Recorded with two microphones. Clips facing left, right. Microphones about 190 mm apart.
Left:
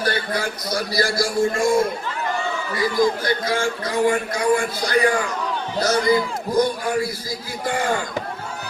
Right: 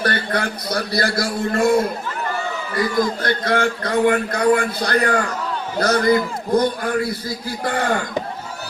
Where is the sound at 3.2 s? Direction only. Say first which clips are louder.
Right 3 dB; 60° right (ahead or behind).